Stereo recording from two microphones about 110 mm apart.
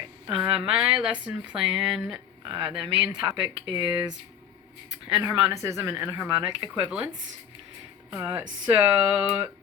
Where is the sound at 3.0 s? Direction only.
5° right (ahead or behind).